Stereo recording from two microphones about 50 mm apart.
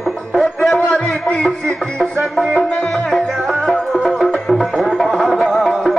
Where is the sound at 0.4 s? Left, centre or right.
Centre.